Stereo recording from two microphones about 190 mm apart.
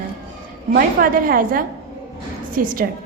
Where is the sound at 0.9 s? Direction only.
50° right (ahead or behind).